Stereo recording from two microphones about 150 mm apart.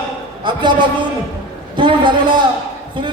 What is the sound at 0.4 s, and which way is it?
A man's voice, 30° right (ahead or behind).